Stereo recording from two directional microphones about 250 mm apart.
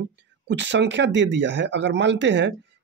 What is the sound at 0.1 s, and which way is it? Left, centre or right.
Speech, right.